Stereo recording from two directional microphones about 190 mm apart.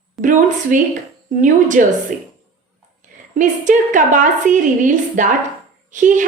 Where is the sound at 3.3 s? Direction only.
40° right (ahead or behind).